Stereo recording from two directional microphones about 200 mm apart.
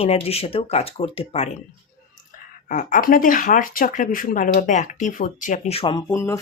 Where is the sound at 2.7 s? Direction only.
40° left (ahead or behind).